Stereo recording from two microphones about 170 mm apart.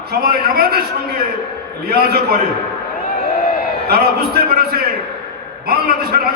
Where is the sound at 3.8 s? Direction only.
65° right (ahead or behind).